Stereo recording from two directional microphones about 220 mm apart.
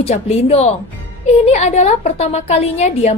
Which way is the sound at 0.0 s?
30° left (ahead or behind).